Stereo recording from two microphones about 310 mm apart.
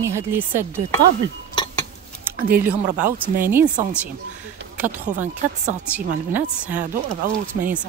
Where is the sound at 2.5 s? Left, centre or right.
Centre.